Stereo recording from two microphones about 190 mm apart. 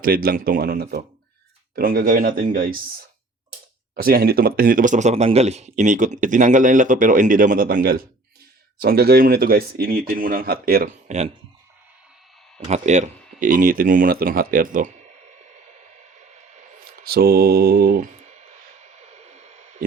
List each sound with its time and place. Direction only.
0.0 s speech: 50° right (ahead or behind)
3.9 s speech: 55° right (ahead or behind)
12.5 s speech: 35° right (ahead or behind)
17.0 s speech: 55° right (ahead or behind); by 18.4 s 40° right (ahead or behind)
19.1 s a sound: 35° right (ahead or behind)